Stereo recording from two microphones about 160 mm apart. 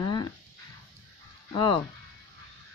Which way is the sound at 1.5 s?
30° left (ahead or behind).